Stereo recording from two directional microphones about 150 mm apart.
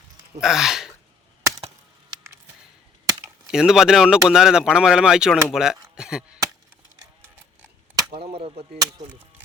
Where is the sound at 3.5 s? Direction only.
5° right (ahead or behind).